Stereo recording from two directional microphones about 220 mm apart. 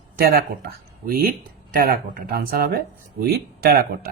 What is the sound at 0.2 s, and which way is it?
Speech, 45° right (ahead or behind).